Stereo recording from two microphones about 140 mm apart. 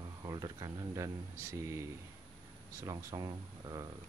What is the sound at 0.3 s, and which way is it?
Speech, 30° right (ahead or behind).